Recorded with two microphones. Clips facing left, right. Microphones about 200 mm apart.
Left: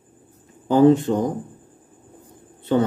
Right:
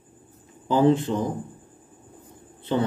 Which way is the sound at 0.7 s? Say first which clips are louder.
Left 5 dB; 45° left (ahead or behind).